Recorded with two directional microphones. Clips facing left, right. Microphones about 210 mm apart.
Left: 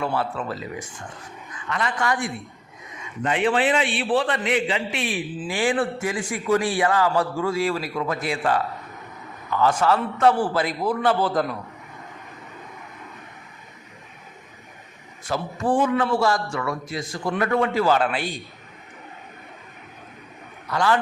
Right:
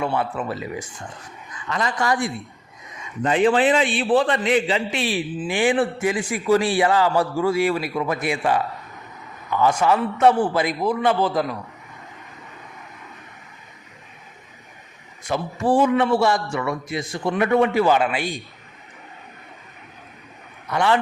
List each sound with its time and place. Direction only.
0.1 s a man's voice: 15° right (ahead or behind)
1.7 s a man's voice: 35° right (ahead or behind)
5.5 s a man's voice: 20° right (ahead or behind)
15.3 s a man's voice: 25° right (ahead or behind)
20.7 s a man's voice: 25° right (ahead or behind)